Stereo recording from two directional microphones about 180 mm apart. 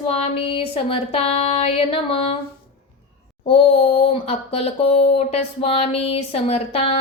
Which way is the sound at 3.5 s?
30° left (ahead or behind).